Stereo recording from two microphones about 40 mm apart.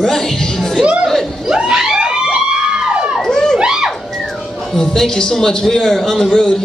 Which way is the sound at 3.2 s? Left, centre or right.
Centre.